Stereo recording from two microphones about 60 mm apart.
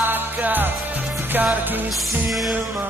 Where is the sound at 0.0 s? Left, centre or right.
Right.